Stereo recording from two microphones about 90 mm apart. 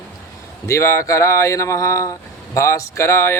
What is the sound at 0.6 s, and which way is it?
Speech, 35° left (ahead or behind).